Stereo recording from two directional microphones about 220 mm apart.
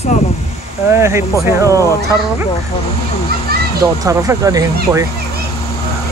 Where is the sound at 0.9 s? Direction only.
10° right (ahead or behind).